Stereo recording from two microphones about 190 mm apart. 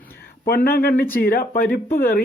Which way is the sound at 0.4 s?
55° left (ahead or behind).